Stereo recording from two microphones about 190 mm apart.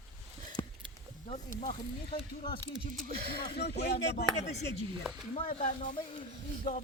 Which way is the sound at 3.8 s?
60° left (ahead or behind).